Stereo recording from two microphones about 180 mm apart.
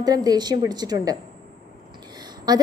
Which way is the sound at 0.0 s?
20° right (ahead or behind).